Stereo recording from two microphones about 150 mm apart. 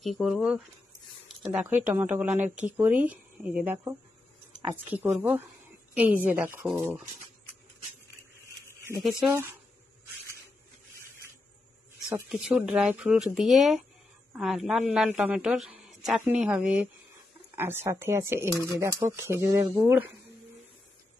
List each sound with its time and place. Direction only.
0.0 s a man's voice: centre (ahead or behind)
12.0 s a man's voice: 5° right (ahead or behind)